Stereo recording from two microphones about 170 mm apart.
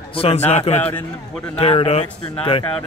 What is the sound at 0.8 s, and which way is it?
Speech, 10° left (ahead or behind).